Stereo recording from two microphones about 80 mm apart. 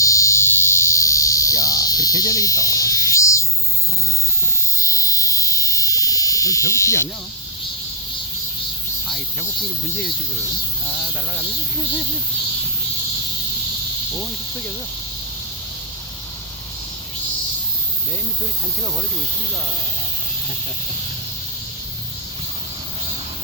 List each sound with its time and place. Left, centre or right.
0.0 s cricket: left
4.4 s frog: left